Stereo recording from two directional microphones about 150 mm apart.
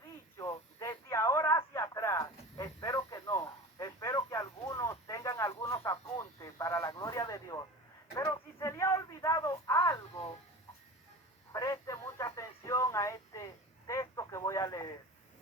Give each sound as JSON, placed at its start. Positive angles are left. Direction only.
{"t": 0.3, "sound": "radio", "side_deg": 20}
{"t": 8.1, "sound": "a sound", "side_deg": 20}
{"t": 11.5, "sound": "radio", "side_deg": 20}